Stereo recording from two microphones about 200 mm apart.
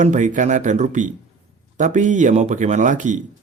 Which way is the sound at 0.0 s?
40° right (ahead or behind).